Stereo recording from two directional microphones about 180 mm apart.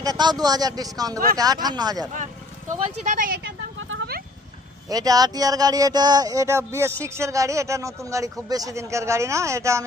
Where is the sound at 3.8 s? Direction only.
90° right.